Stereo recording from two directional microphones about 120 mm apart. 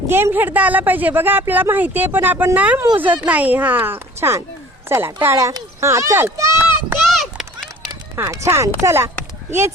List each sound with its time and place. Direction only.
0.1 s a woman's voice: 20° right (ahead or behind)
7.0 s a sound: centre (ahead or behind)
8.1 s speech: 25° right (ahead or behind)